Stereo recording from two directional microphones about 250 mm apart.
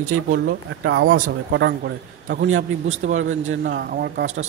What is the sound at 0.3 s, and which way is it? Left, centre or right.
Speech, right.